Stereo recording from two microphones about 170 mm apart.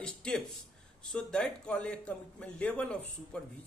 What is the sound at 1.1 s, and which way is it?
Speech, 5° left (ahead or behind).